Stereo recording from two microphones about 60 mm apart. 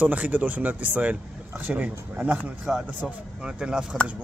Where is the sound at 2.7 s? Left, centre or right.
Centre.